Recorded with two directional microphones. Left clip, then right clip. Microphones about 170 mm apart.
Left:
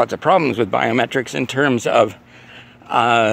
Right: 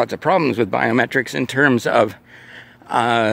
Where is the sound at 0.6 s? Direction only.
40° right (ahead or behind).